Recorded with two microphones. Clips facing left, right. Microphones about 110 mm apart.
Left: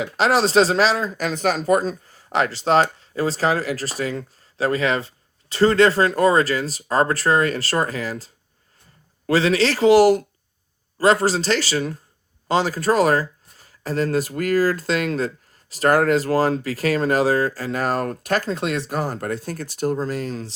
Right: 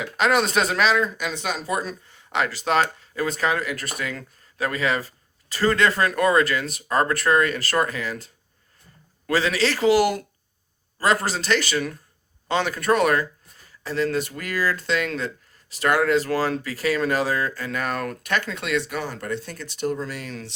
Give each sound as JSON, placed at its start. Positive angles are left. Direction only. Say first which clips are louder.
{"t": 0.0, "sound": "speech", "louder": "left 2 dB", "side_deg": 35}